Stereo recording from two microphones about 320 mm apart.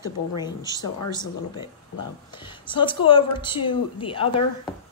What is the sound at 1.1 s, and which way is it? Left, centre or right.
A woman's voice, centre.